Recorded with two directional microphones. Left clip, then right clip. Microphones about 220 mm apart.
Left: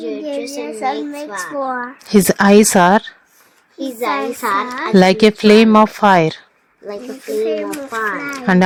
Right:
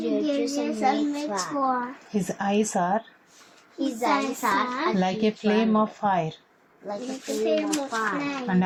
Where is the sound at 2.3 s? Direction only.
45° left (ahead or behind).